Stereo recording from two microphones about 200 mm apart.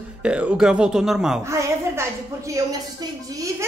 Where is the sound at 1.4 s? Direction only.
15° right (ahead or behind).